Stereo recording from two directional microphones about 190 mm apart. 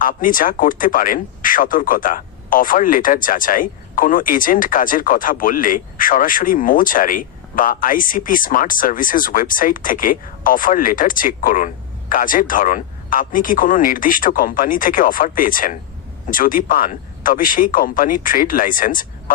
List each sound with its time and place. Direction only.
0.0 s speech: 45° left (ahead or behind)